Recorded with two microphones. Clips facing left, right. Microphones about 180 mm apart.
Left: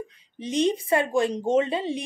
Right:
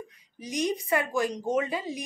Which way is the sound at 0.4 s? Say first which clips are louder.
Left 6 dB; 30° left (ahead or behind).